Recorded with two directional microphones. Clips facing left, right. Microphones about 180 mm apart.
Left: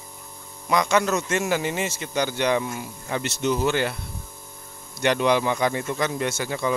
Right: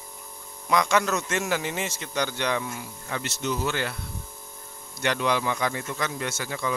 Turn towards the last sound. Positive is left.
turn(degrees=25)  # may be behind; listen again after turning